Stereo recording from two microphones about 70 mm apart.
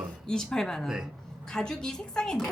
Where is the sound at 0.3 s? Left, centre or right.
Centre.